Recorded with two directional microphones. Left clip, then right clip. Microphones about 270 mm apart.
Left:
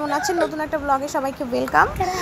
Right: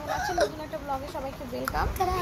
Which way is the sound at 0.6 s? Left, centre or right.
Left.